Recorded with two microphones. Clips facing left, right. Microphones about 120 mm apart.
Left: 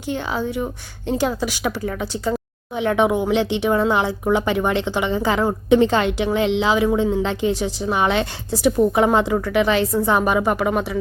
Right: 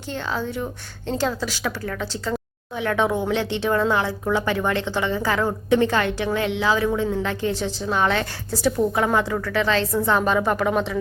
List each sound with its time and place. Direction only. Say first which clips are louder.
0.1 s a woman's voice: left 3 dB; 15° left (ahead or behind)